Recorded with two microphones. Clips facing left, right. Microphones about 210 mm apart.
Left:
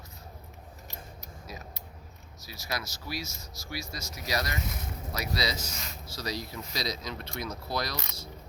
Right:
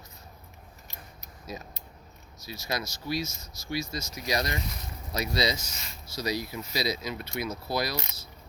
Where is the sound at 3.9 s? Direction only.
25° right (ahead or behind).